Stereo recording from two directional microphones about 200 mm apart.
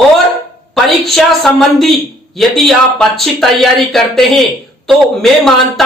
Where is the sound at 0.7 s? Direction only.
Centre (ahead or behind).